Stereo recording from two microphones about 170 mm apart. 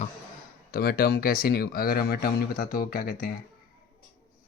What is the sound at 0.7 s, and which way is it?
Speech, 60° left (ahead or behind).